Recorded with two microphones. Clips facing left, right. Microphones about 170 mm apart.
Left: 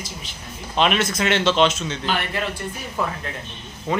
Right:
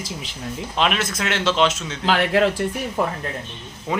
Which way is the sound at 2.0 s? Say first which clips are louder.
Right 9 dB; 90° right.